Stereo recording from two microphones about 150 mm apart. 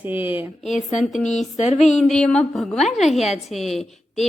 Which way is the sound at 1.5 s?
50° left (ahead or behind).